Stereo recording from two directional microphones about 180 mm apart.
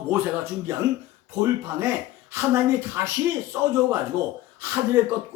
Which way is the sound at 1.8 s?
15° right (ahead or behind).